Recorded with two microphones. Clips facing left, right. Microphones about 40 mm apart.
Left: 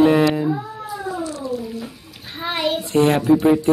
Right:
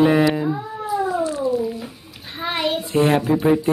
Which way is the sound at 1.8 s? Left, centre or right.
Centre.